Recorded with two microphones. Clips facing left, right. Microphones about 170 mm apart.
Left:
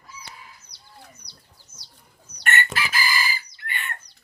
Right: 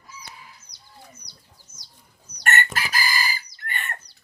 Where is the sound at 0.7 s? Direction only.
20° right (ahead or behind).